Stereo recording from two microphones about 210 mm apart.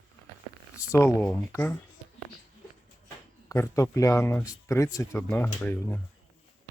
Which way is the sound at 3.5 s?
15° left (ahead or behind).